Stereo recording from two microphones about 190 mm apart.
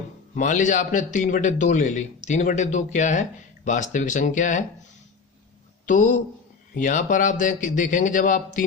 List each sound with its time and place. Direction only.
0.3 s a man's voice: 40° left (ahead or behind)
5.9 s a man's voice: 40° left (ahead or behind)